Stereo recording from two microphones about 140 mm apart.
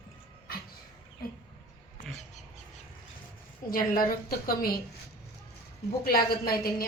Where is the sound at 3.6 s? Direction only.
90° left.